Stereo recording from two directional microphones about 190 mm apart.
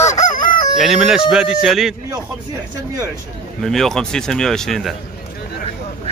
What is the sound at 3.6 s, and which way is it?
A man's voice, centre (ahead or behind).